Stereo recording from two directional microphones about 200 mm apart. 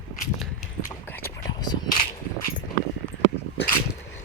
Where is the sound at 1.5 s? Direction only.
20° left (ahead or behind).